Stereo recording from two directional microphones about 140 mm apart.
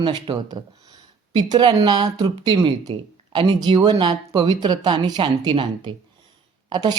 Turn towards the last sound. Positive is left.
turn(degrees=-30)  # may be behind; listen again after turning